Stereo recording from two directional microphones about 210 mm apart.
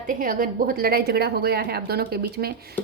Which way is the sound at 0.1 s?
40° right (ahead or behind).